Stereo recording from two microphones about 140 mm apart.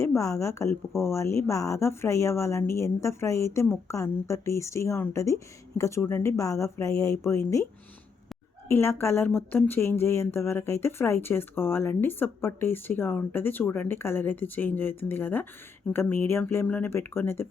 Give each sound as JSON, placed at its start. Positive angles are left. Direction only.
{"t": 0.0, "sound": "a woman's voice", "side_deg": 20}
{"t": 8.7, "sound": "speech", "side_deg": 20}